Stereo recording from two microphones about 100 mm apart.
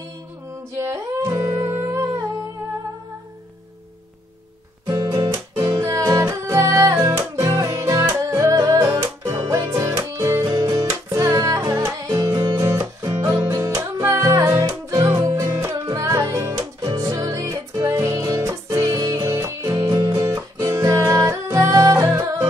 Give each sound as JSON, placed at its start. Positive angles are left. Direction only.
{"t": 0.7, "sound": "music", "side_deg": -30}
{"t": 1.7, "sound": "music", "side_deg": -30}
{"t": 4.9, "sound": "guitar", "side_deg": -45}
{"t": 5.3, "sound": "music", "side_deg": -30}
{"t": 10.5, "sound": "music", "side_deg": -40}